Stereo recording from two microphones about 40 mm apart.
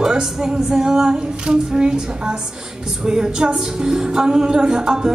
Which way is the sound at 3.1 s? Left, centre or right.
Centre.